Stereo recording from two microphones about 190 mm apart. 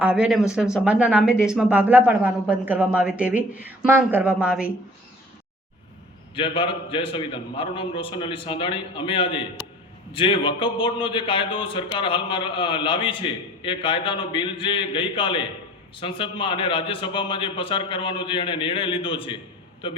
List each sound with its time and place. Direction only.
0.0 s speech: 5° right (ahead or behind)
6.3 s speech: 25° left (ahead or behind)